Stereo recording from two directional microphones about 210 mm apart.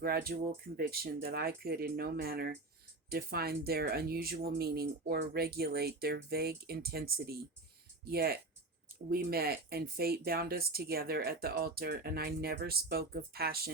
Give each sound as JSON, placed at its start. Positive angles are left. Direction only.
{"t": 0.0, "sound": "speech", "side_deg": -45}